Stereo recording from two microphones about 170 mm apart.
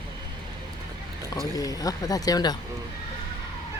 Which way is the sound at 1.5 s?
20° left (ahead or behind).